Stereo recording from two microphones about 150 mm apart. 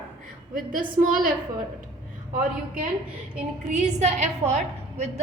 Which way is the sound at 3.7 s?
50° right (ahead or behind).